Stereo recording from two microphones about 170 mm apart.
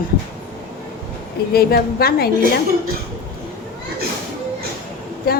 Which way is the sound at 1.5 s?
65° left (ahead or behind).